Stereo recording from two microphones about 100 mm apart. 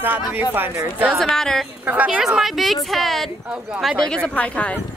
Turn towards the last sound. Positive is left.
turn(degrees=15)  # may be behind; listen again after turning